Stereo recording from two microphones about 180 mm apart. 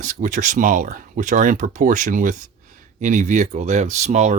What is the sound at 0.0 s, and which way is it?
Speech, 45° right (ahead or behind).